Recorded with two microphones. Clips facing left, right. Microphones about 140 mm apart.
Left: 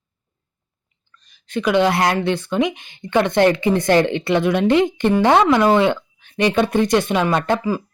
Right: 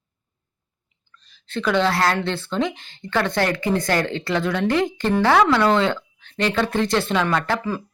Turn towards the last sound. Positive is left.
turn(degrees=20)  # may be behind; listen again after turning